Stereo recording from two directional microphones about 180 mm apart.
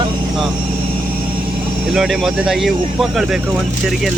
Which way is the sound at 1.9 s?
Centre (ahead or behind).